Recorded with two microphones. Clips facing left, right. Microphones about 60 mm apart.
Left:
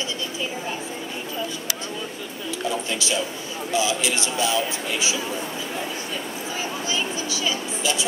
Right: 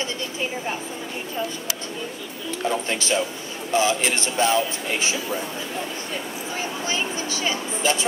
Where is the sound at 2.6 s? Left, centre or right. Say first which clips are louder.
Right 3 dB; right.